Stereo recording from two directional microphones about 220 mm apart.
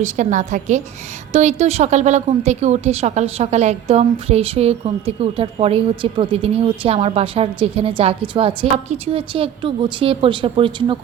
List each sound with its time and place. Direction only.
0.0 s a woman's voice: 35° right (ahead or behind)